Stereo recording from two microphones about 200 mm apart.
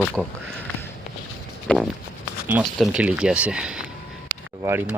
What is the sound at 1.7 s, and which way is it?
Speech, 5° left (ahead or behind).